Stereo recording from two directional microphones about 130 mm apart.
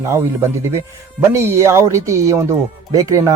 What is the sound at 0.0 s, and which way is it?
Speech, 20° right (ahead or behind).